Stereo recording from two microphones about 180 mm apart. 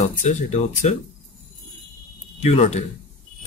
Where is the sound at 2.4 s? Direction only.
35° left (ahead or behind).